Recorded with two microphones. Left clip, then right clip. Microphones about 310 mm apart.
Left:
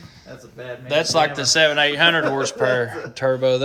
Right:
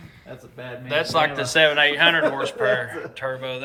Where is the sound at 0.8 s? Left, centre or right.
Centre.